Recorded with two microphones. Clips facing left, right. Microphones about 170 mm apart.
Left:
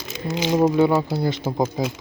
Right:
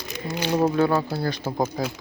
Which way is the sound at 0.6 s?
20° left (ahead or behind).